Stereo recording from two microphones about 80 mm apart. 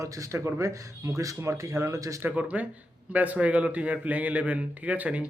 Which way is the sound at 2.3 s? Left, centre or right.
Centre.